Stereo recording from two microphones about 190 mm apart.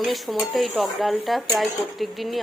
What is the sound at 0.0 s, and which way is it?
Speech, centre (ahead or behind).